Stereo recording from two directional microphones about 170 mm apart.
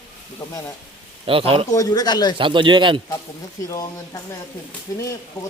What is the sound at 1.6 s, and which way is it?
Speech, 20° left (ahead or behind).